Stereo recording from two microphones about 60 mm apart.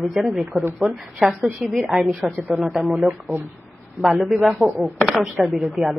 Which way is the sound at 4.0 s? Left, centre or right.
Centre.